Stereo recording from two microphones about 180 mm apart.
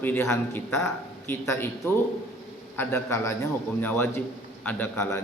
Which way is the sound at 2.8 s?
15° left (ahead or behind).